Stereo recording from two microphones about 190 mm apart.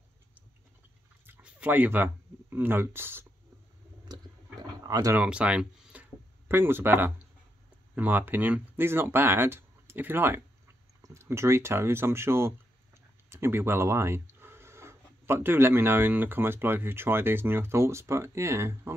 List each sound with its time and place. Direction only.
1.2 s speech: 10° right (ahead or behind)
4.1 s a sound: 20° right (ahead or behind)
4.8 s speech: 20° right (ahead or behind)
5.2 s speech: 5° right (ahead or behind)